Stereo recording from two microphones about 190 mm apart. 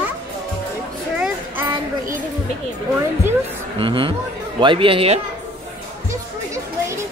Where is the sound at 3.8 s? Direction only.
25° right (ahead or behind).